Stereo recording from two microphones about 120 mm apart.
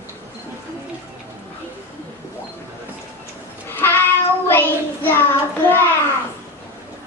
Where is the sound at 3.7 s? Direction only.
15° left (ahead or behind).